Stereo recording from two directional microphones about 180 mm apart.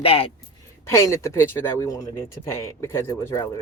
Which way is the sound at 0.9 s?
15° left (ahead or behind).